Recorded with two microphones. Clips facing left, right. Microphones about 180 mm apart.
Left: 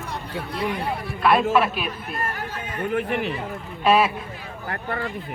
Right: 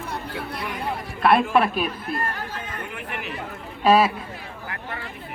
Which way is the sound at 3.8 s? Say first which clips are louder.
Right 1 dB; 35° right (ahead or behind).